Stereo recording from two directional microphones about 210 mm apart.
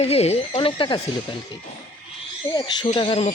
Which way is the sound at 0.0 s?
30° left (ahead or behind).